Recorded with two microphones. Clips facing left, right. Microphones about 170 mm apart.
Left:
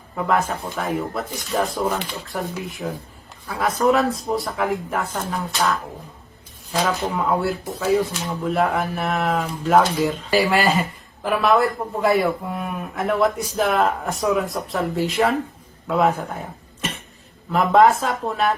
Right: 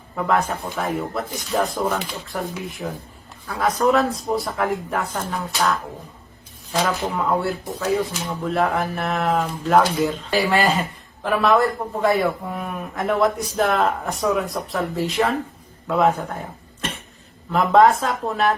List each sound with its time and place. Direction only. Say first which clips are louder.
0.2 s speech: even; centre (ahead or behind)
17.5 s speech: even; centre (ahead or behind)